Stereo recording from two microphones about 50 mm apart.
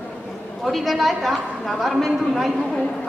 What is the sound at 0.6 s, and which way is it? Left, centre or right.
A woman's voice, centre.